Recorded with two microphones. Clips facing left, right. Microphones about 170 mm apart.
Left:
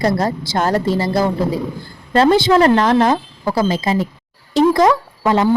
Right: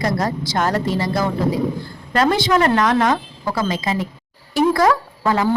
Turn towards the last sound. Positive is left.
turn(degrees=20)  # may be behind; listen again after turning